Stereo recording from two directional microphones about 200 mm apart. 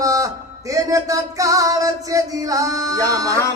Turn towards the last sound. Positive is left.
turn(degrees=-15)  # may be behind; listen again after turning